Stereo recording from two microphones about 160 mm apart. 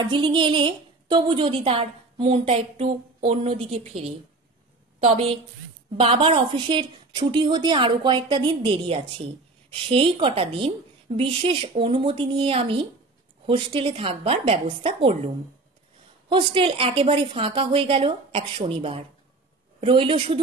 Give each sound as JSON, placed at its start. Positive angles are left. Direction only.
{"t": 0.0, "sound": "a woman's voice", "side_deg": -30}
{"t": 5.0, "sound": "a woman's voice", "side_deg": -40}